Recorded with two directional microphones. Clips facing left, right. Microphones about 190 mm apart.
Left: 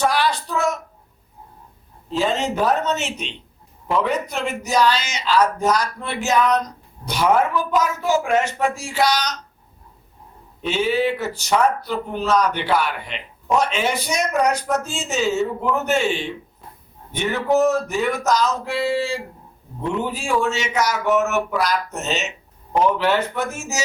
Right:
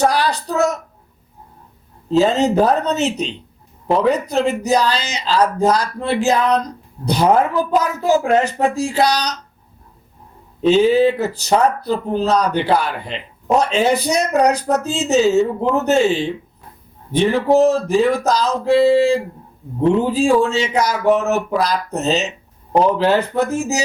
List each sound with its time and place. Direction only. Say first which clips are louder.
0.0 s speech: right 3 dB; 40° right (ahead or behind)
2.2 s speech: right 4 dB; 40° right (ahead or behind)
10.6 s speech: right 8 dB; 40° right (ahead or behind)